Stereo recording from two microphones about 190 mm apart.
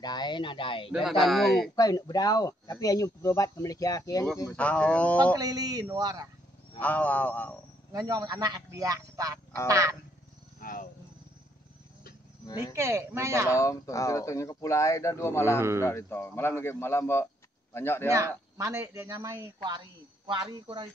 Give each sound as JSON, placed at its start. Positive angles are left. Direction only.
{"t": 0.0, "sound": "speech", "side_deg": 20}
{"t": 0.9, "sound": "speech", "side_deg": 0}
{"t": 1.8, "sound": "speech", "side_deg": 20}
{"t": 4.5, "sound": "speech", "side_deg": 5}
{"t": 5.4, "sound": "a man's voice", "side_deg": -20}
{"t": 6.8, "sound": "speech", "side_deg": 10}
{"t": 7.9, "sound": "a man's voice", "side_deg": -20}
{"t": 10.6, "sound": "speech", "side_deg": 45}
{"t": 12.7, "sound": "speech", "side_deg": -15}
{"t": 13.5, "sound": "speech", "side_deg": 15}
{"t": 18.6, "sound": "speech", "side_deg": -15}